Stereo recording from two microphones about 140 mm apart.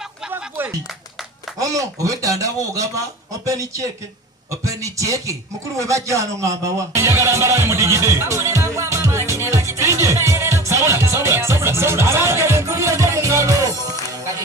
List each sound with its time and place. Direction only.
0.3 s music: 15° right (ahead or behind)
1.5 s a man's voice: 25° right (ahead or behind)